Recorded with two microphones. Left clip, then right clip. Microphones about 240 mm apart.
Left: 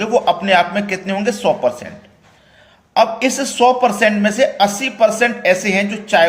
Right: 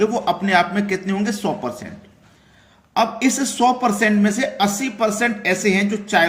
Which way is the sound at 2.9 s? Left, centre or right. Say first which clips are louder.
Left 5 dB; centre.